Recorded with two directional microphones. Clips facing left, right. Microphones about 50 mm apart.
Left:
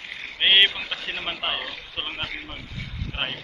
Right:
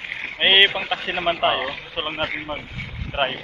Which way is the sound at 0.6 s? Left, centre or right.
Right.